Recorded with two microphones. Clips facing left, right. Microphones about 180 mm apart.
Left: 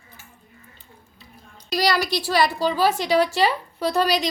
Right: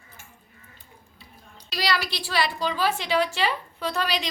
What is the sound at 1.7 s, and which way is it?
A woman's voice, 45° left (ahead or behind).